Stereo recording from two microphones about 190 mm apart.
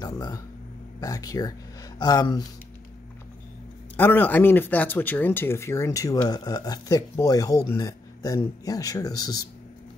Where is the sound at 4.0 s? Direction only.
10° left (ahead or behind).